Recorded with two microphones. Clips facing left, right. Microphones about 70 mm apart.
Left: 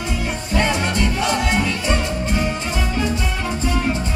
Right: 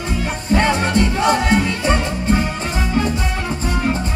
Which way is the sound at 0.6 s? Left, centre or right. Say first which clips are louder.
Right 3 dB; right.